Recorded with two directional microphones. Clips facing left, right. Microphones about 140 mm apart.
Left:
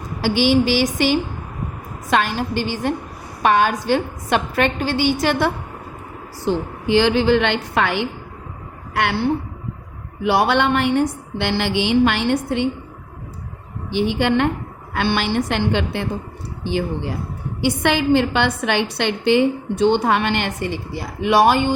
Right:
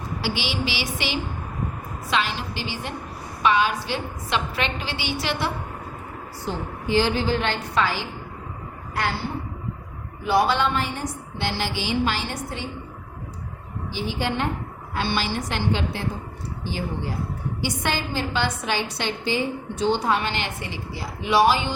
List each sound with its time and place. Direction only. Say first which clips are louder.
0.2 s a woman's voice: left 12 dB; 50° left (ahead or behind)
6.4 s a woman's voice: left 8 dB; 80° left
10.2 s a woman's voice: left 4 dB; 70° left (ahead or behind)
13.9 s a woman's voice: left 9 dB; 65° left (ahead or behind)